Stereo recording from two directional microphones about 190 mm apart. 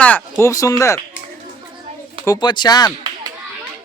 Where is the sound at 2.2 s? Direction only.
25° left (ahead or behind).